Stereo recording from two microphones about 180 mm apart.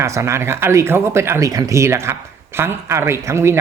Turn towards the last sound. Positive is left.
turn(degrees=-15)  # may be behind; listen again after turning